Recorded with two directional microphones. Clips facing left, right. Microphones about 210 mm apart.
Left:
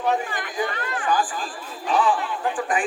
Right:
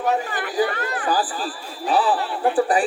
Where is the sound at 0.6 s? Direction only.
35° right (ahead or behind).